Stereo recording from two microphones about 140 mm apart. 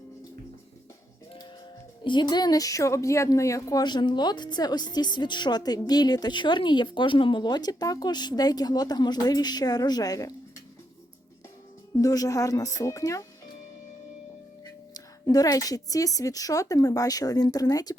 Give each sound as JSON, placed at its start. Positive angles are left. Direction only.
{"t": 2.0, "sound": "speech", "side_deg": 30}
{"t": 11.9, "sound": "speech", "side_deg": 25}
{"t": 14.6, "sound": "speech", "side_deg": 25}